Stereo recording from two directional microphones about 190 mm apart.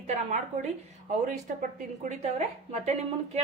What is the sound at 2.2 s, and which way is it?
A woman's voice, 35° right (ahead or behind).